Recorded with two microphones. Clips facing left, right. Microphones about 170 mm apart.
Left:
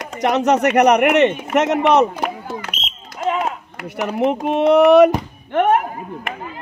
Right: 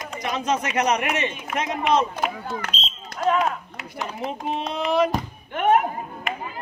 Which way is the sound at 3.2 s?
20° left (ahead or behind).